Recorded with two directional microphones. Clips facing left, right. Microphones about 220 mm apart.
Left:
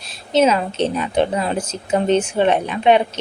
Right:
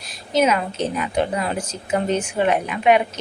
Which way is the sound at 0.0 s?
25° left (ahead or behind).